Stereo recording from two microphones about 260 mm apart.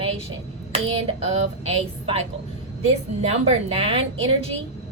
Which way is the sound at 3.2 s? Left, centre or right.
Right.